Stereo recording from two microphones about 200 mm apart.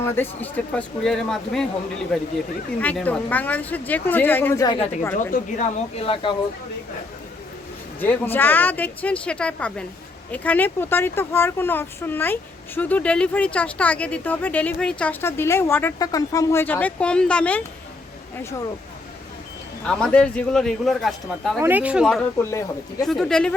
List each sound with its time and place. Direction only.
0.0 s a man's voice: 10° left (ahead or behind)
2.8 s speech: 5° left (ahead or behind)
5.3 s speech: 35° left (ahead or behind)
8.0 s speech: 10° left (ahead or behind)
19.8 s a man's voice: 5° left (ahead or behind)
22.4 s speech: 15° left (ahead or behind)
23.0 s a man's voice: centre (ahead or behind)